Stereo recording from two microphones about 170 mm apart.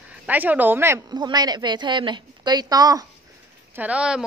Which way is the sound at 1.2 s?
25° right (ahead or behind).